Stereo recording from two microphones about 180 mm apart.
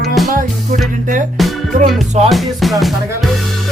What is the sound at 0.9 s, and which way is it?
Speech, 45° right (ahead or behind).